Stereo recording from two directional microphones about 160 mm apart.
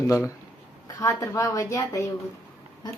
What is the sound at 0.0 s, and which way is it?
A woman's voice, 20° left (ahead or behind).